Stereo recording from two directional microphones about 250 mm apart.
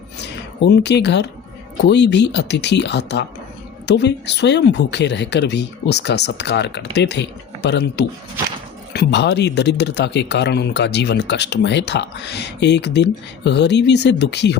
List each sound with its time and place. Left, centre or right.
0.6 s speech: left